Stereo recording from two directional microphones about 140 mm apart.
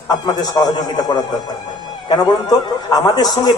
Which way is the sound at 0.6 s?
30° left (ahead or behind).